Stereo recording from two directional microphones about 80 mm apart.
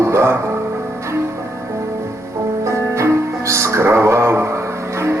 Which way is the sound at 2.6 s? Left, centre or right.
Right.